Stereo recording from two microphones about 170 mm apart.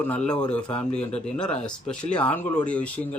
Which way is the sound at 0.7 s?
35° left (ahead or behind).